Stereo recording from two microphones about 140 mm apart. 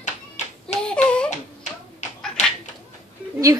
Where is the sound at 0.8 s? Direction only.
10° left (ahead or behind).